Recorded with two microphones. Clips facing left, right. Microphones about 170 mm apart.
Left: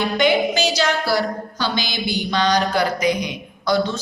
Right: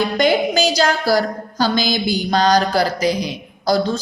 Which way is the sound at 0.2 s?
40° right (ahead or behind).